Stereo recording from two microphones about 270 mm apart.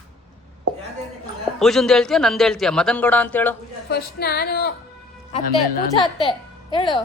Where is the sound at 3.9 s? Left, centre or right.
Left.